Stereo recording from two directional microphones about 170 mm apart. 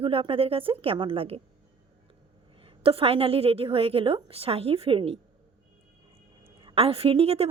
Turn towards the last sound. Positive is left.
turn(degrees=-35)  # may be behind; listen again after turning